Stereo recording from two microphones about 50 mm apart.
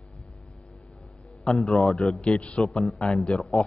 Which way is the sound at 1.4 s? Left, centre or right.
Centre.